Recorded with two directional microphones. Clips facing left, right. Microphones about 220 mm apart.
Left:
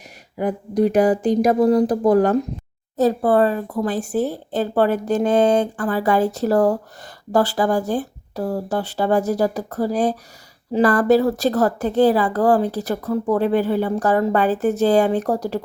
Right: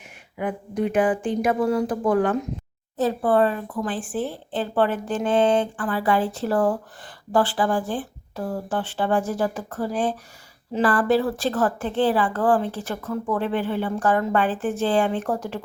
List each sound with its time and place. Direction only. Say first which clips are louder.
0.3 s a woman's voice: left 6 dB; 35° left (ahead or behind)